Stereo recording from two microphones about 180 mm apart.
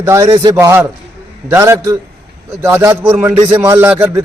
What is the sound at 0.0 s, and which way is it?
A man's voice, 15° right (ahead or behind).